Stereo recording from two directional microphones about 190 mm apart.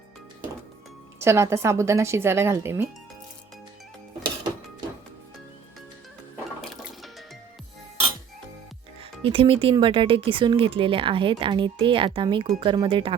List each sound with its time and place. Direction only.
1.2 s speech: 15° right (ahead or behind)
6.8 s music: centre (ahead or behind)
9.0 s speech: 30° right (ahead or behind)